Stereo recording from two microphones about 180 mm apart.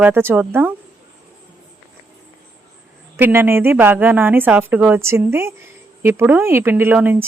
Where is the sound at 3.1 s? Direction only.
10° right (ahead or behind).